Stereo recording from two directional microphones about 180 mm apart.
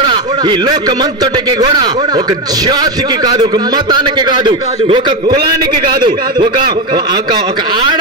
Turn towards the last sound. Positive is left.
turn(degrees=-25)  # may be behind; listen again after turning